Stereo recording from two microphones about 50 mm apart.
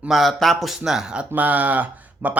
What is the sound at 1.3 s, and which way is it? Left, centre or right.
Speech, right.